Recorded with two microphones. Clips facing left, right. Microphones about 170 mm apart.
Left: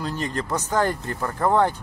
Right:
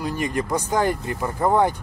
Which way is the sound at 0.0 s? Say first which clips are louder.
Right 3 dB; 10° right (ahead or behind).